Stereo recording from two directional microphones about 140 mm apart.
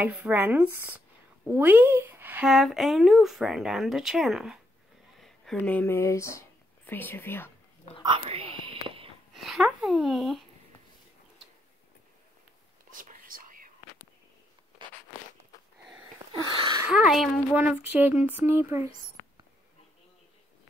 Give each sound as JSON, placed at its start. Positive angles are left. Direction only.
{"t": 0.0, "sound": "speech", "side_deg": -10}
{"t": 2.4, "sound": "speech", "side_deg": 0}
{"t": 5.2, "sound": "a sound", "side_deg": 0}
{"t": 5.6, "sound": "speech", "side_deg": 15}
{"t": 8.0, "sound": "whispering", "side_deg": -40}
{"t": 9.3, "sound": "speech", "side_deg": 0}
{"t": 12.9, "sound": "whispering", "side_deg": -75}
{"t": 14.8, "sound": "zipper", "side_deg": -35}
{"t": 16.4, "sound": "a sound", "side_deg": -35}
{"t": 16.9, "sound": "speech", "side_deg": 0}